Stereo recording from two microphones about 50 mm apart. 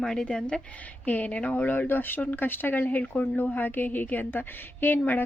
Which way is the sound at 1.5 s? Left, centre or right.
Left.